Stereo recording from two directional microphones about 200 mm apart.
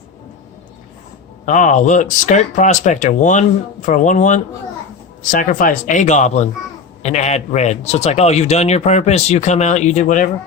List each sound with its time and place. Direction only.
1.5 s speech: 40° left (ahead or behind)